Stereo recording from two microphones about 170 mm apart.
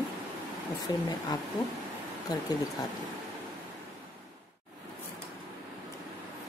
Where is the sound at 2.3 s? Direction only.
20° left (ahead or behind).